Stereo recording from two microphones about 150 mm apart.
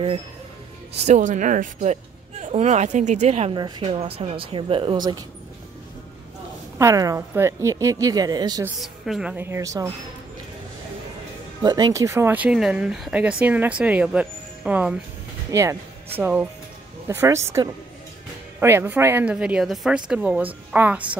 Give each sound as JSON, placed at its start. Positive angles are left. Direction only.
{"t": 0.9, "sound": "speech", "side_deg": -50}
{"t": 3.5, "sound": "speech", "side_deg": -30}
{"t": 6.8, "sound": "a woman's voice", "side_deg": -20}
{"t": 8.8, "sound": "speech", "side_deg": 0}
{"t": 11.6, "sound": "speech", "side_deg": -25}
{"t": 15.5, "sound": "a woman's voice", "side_deg": -20}
{"t": 19.3, "sound": "speech", "side_deg": -5}